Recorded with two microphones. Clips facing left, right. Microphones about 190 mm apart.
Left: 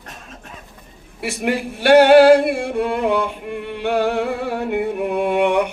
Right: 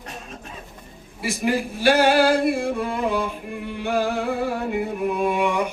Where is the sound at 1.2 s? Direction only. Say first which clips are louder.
Left 1 dB; 65° left (ahead or behind).